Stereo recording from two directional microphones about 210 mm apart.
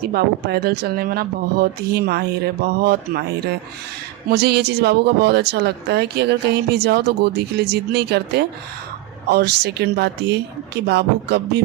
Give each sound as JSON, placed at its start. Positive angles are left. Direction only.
{"t": 0.1, "sound": "a woman's voice", "side_deg": -50}